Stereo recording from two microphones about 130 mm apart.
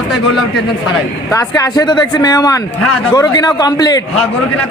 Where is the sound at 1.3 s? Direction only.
30° left (ahead or behind).